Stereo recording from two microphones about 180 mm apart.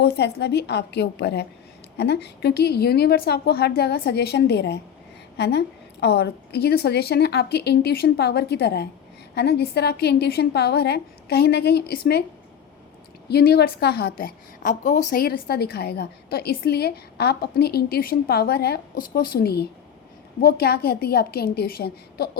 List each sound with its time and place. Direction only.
0.0 s a woman's voice: 65° left (ahead or behind)
13.2 s a woman's voice: 65° left (ahead or behind)